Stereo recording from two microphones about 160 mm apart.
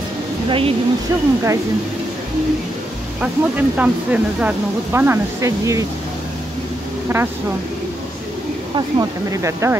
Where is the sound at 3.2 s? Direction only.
10° right (ahead or behind).